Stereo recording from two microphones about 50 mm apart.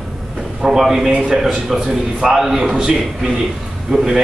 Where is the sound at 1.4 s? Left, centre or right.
Centre.